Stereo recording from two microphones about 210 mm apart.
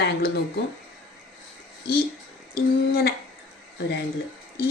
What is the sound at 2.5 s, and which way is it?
Speech, 50° left (ahead or behind).